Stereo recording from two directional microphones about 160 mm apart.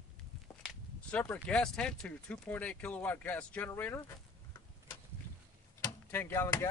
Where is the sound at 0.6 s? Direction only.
5° left (ahead or behind).